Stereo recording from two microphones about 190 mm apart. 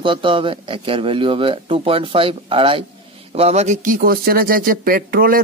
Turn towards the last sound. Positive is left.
turn(degrees=-50)  # may be behind; listen again after turning